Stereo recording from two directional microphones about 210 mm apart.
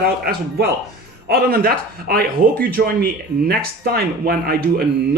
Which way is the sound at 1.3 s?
45° right (ahead or behind).